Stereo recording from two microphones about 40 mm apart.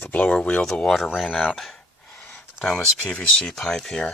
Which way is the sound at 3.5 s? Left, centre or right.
Centre.